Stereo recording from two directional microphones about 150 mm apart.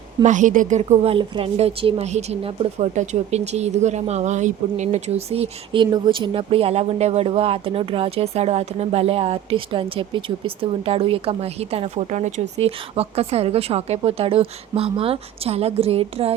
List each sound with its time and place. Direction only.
0.2 s a woman's voice: 55° right (ahead or behind)